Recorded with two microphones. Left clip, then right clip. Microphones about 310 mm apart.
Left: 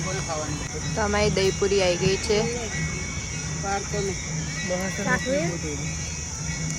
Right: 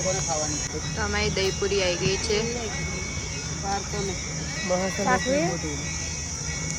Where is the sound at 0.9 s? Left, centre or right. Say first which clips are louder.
Left 4 dB; centre.